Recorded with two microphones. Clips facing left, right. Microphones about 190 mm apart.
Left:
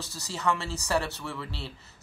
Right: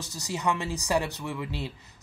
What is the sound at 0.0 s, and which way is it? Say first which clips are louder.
A man's voice: right 1 dB; 15° right (ahead or behind).